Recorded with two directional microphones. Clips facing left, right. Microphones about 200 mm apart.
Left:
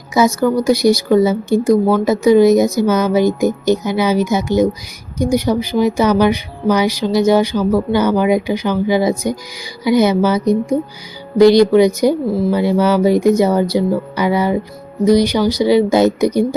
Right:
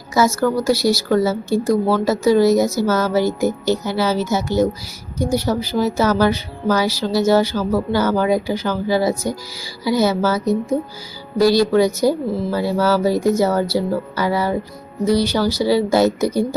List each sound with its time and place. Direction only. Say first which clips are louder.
0.1 s speech: left 3 dB; 15° left (ahead or behind)